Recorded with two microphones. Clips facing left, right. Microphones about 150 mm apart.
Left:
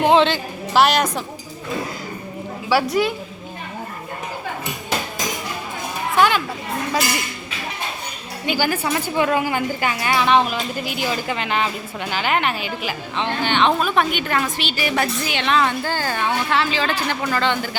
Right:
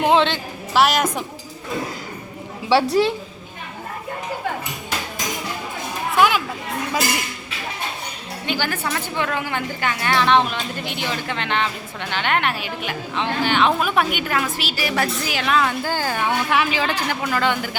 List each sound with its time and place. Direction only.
0.0 s a woman's voice: centre (ahead or behind)
2.9 s a woman's voice: 30° right (ahead or behind)
6.1 s a sound: 5° right (ahead or behind)
8.4 s a woman's voice: 10° left (ahead or behind); by 17.6 s 5° right (ahead or behind)